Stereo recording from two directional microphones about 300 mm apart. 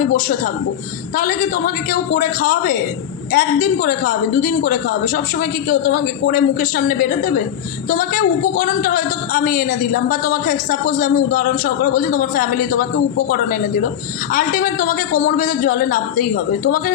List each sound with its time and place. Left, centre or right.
0.1 s a man's voice: left